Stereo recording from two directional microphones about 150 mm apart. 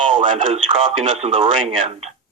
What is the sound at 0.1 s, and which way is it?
Speech, 35° right (ahead or behind).